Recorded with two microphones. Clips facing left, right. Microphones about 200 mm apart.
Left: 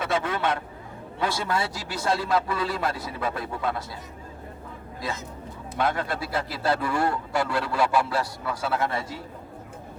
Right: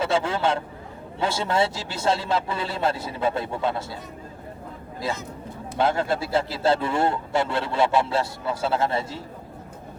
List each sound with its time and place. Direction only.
0.0 s a man's voice: 30° right (ahead or behind)
5.7 s a man's voice: 25° right (ahead or behind)